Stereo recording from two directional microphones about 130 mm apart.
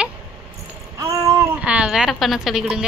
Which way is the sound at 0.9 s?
25° right (ahead or behind).